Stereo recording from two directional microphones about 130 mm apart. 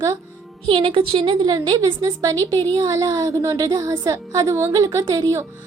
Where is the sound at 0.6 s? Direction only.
45° right (ahead or behind).